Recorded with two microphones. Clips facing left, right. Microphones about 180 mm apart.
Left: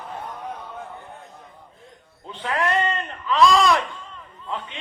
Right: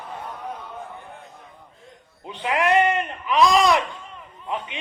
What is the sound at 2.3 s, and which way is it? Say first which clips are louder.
A man's voice: right 3 dB; 15° right (ahead or behind).